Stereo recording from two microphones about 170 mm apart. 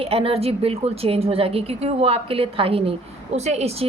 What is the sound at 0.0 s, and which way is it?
A woman's voice, 35° right (ahead or behind).